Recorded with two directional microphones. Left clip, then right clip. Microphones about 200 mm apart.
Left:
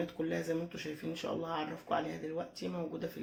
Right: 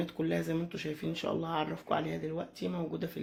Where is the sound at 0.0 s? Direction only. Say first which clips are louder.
Right 3 dB; 50° right (ahead or behind).